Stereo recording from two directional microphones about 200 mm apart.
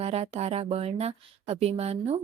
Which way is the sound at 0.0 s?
30° right (ahead or behind).